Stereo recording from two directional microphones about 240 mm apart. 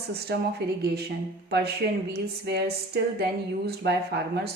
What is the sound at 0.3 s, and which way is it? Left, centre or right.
A woman's voice, right.